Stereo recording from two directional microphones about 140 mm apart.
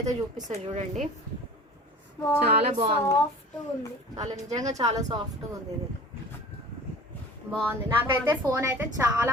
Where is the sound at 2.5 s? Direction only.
45° right (ahead or behind).